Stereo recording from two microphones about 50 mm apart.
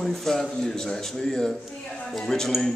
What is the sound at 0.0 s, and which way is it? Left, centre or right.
Speech, centre.